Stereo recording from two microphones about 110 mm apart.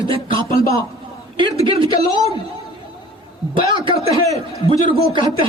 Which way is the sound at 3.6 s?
50° right (ahead or behind).